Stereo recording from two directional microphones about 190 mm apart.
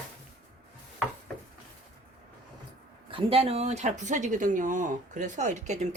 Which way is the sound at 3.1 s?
30° right (ahead or behind).